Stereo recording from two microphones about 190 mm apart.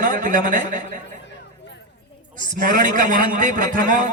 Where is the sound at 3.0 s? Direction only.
45° right (ahead or behind).